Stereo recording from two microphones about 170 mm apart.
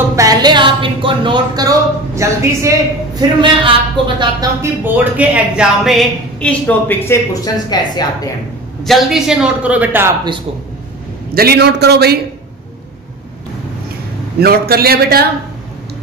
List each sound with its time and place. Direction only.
0.1 s a woman's voice: 20° right (ahead or behind)
4.6 s speech: 10° right (ahead or behind)
6.4 s a woman's voice: 10° left (ahead or behind)
7.7 s speech: 25° left (ahead or behind)
8.8 s speech: centre (ahead or behind)
11.3 s a man's voice: 70° right (ahead or behind)
14.4 s a man's voice: 65° right (ahead or behind)